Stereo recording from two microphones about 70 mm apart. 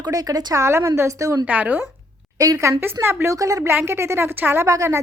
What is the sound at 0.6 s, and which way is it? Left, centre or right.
Speech, right.